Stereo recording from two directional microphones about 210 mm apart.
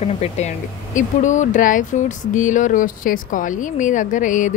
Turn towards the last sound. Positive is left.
turn(degrees=35)  # may be behind; listen again after turning